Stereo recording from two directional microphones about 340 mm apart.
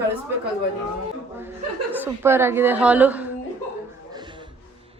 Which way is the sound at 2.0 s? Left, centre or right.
Centre.